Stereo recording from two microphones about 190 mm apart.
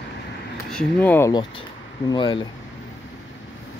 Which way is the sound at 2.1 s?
25° left (ahead or behind).